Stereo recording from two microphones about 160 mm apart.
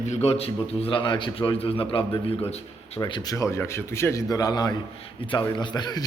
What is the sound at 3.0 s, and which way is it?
Speech, 25° left (ahead or behind).